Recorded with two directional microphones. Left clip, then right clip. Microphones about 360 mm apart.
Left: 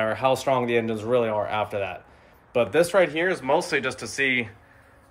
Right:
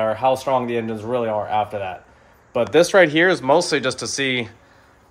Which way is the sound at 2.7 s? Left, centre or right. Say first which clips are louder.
Right 8 dB; right.